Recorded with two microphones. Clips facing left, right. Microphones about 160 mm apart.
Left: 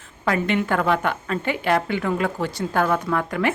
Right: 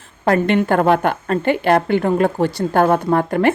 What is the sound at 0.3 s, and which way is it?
A woman's voice, 50° right (ahead or behind).